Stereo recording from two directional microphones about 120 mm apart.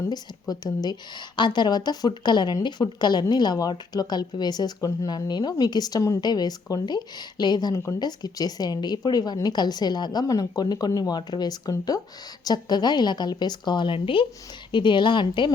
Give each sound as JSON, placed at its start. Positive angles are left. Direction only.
{"t": 0.0, "sound": "a woman's voice", "side_deg": 35}